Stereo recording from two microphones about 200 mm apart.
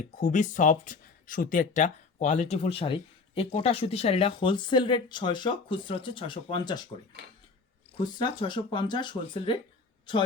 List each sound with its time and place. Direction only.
0.2 s speech: 40° left (ahead or behind)
7.9 s speech: 20° left (ahead or behind)